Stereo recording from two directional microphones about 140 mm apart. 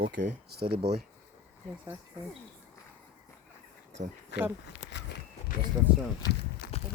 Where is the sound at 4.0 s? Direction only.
65° right (ahead or behind).